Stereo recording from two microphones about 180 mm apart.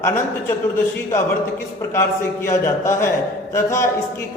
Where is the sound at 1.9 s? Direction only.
15° left (ahead or behind).